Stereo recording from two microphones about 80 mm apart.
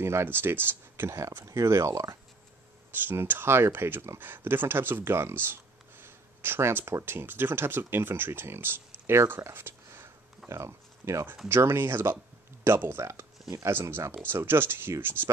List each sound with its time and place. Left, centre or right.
0.0 s speech: right
1.1 s speech: right
3.0 s speech: right
10.5 s speech: right